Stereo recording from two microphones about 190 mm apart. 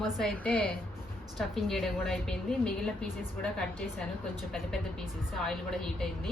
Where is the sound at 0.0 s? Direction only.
5° left (ahead or behind).